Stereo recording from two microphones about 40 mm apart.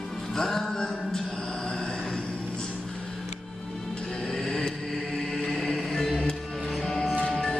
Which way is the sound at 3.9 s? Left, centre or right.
Left.